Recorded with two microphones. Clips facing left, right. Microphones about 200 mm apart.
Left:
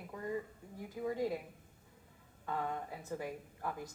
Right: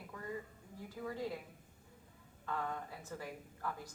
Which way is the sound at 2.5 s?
15° left (ahead or behind).